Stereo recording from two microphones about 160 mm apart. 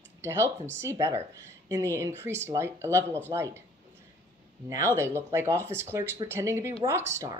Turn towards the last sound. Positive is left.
turn(degrees=-15)  # may be behind; listen again after turning